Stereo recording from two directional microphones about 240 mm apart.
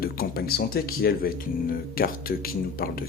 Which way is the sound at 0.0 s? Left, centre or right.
Left.